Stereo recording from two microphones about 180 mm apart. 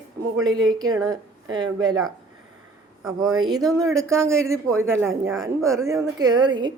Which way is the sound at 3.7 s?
15° right (ahead or behind).